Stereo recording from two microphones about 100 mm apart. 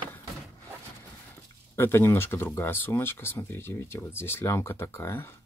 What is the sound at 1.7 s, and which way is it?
Speech, 25° left (ahead or behind).